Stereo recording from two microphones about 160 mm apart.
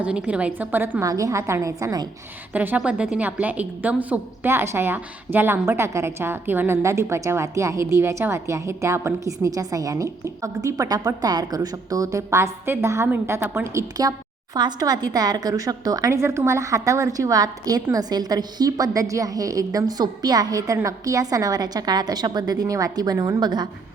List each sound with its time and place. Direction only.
0.0 s a woman's voice: 5° right (ahead or behind)
2.5 s a woman's voice: 10° right (ahead or behind); by 23.6 s 25° right (ahead or behind)